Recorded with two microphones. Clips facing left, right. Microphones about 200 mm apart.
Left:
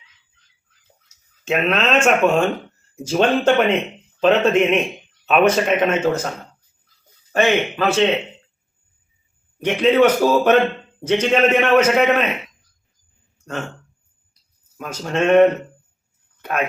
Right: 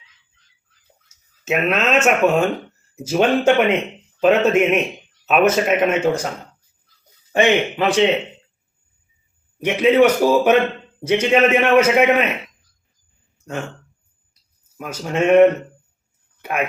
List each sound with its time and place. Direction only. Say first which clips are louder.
1.0 s a sound: even; 5° right (ahead or behind)
2.0 s a man's voice: even; 5° right (ahead or behind)
7.3 s a man's voice: right 1 dB; 15° right (ahead or behind)
9.6 s a man's voice: right 1 dB; 10° right (ahead or behind)
13.4 s speech: right 1 dB; 10° right (ahead or behind)
14.8 s a man's voice: even; 10° right (ahead or behind)